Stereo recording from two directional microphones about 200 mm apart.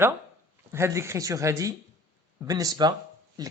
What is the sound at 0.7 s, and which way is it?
Speech, 15° right (ahead or behind).